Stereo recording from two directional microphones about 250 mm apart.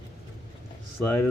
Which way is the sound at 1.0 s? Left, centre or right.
Centre.